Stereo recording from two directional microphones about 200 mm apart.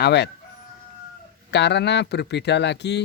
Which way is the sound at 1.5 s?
60° left (ahead or behind).